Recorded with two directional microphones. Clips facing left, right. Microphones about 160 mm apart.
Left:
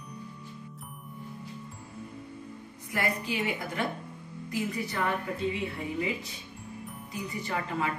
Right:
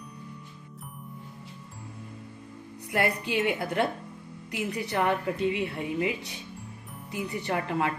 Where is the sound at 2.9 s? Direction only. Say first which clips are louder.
Right 4 dB; 70° right (ahead or behind).